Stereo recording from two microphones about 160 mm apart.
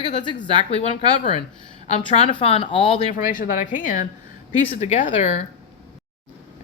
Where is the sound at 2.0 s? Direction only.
35° left (ahead or behind).